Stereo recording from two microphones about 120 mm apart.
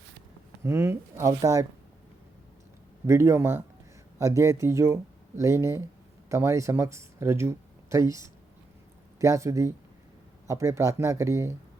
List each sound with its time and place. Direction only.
0.6 s speech: 25° right (ahead or behind)
3.1 s speech: 25° right (ahead or behind)